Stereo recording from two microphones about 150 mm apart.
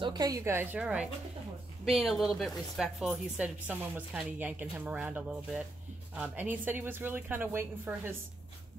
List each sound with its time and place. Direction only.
0.0 s a woman's voice: 25° right (ahead or behind)